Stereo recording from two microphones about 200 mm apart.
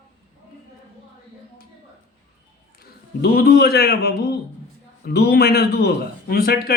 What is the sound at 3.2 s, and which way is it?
Speech, 50° left (ahead or behind).